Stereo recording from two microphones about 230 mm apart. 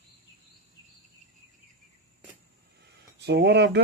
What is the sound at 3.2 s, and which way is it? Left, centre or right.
Speech, right.